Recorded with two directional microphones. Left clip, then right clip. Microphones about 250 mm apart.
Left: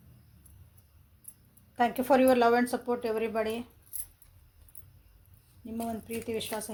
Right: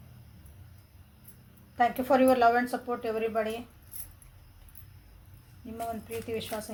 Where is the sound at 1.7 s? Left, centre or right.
Left.